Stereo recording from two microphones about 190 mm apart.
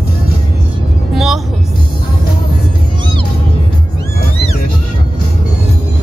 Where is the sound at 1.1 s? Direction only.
Centre (ahead or behind).